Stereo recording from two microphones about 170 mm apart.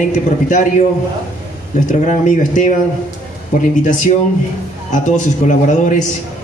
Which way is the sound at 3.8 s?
50° left (ahead or behind).